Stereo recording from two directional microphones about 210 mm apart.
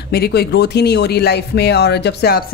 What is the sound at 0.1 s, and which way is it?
Speech, 50° left (ahead or behind).